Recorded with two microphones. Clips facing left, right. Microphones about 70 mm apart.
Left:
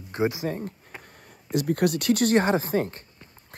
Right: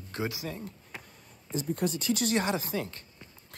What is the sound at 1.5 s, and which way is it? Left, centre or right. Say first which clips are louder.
Speech: left 7 dB; left.